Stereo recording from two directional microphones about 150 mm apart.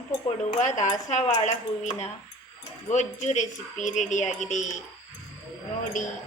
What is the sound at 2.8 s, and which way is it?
Speech, 55° left (ahead or behind).